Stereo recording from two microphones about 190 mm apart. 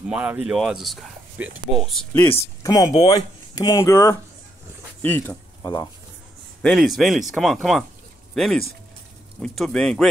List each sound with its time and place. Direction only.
0.1 s speech: 10° right (ahead or behind); by 5.9 s 20° left (ahead or behind)
6.6 s speech: centre (ahead or behind)
9.4 s speech: 5° left (ahead or behind)